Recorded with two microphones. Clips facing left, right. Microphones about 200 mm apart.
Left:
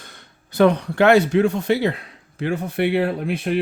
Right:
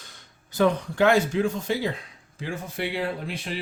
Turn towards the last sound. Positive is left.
turn(degrees=55)  # may be behind; listen again after turning